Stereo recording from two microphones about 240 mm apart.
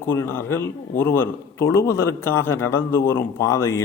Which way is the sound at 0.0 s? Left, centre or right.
Centre.